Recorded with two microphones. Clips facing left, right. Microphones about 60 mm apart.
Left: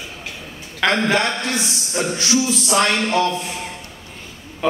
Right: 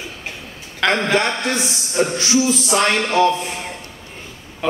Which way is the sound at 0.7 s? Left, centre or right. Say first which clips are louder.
Even; centre.